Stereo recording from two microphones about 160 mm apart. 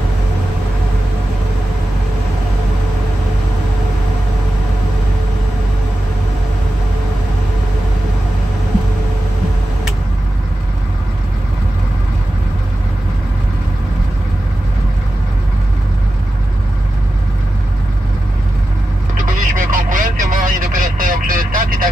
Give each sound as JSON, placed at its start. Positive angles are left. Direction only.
{"t": 19.2, "sound": "vehicle", "side_deg": -60}